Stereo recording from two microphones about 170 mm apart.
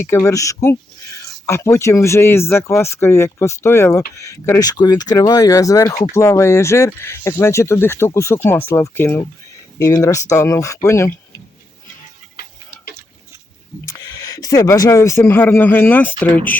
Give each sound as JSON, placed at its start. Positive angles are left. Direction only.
{"t": 0.0, "sound": "speech", "side_deg": 15}
{"t": 13.8, "sound": "speech", "side_deg": 20}